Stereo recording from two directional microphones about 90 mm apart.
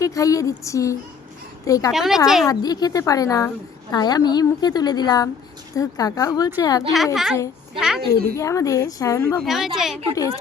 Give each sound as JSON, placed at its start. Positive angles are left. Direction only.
{"t": 0.0, "sound": "a woman's voice", "side_deg": 40}
{"t": 1.9, "sound": "speech", "side_deg": -5}
{"t": 2.5, "sound": "a woman's voice", "side_deg": 45}
{"t": 3.9, "sound": "a woman's voice", "side_deg": 50}
{"t": 6.9, "sound": "a woman's voice", "side_deg": -5}
{"t": 8.4, "sound": "speech", "side_deg": 35}
{"t": 9.4, "sound": "speech", "side_deg": -5}